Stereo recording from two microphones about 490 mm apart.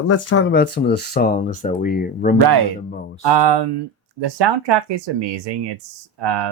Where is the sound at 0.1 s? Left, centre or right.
Left.